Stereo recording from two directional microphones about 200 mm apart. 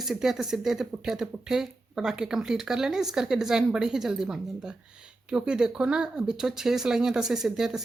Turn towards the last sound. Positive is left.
turn(degrees=-5)  # may be behind; listen again after turning